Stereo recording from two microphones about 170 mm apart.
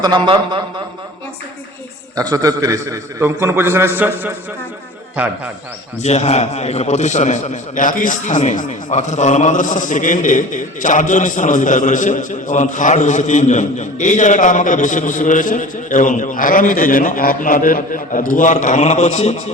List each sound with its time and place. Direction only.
0.0 s a man's voice: 25° right (ahead or behind)
2.1 s a man's voice: 20° right (ahead or behind)
6.0 s a man's voice: 40° left (ahead or behind)